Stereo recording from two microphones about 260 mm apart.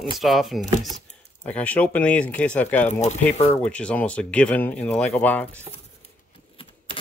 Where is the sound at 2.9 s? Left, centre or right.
Left.